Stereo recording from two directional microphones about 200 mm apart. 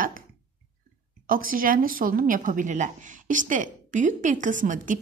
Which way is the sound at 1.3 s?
45° right (ahead or behind).